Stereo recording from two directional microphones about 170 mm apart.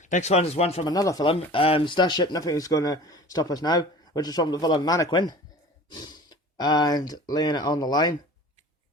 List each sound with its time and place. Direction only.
0.0 s speech: 45° left (ahead or behind)
0.9 s speech: 20° left (ahead or behind)
1.3 s speech: 35° left (ahead or behind)